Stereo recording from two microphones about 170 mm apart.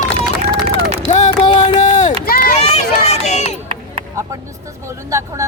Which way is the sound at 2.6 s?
40° left (ahead or behind).